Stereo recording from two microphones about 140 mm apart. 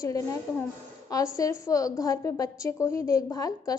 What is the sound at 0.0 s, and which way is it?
A woman's voice, 25° left (ahead or behind).